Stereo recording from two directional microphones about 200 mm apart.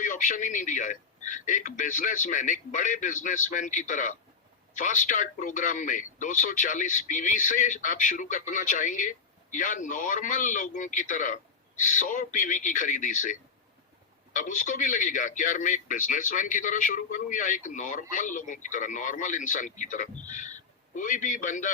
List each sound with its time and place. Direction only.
0.0 s speech: 40° left (ahead or behind)
14.3 s a man's voice: 40° left (ahead or behind)